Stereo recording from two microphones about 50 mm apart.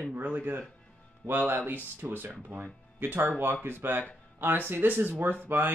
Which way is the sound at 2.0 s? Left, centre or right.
Right.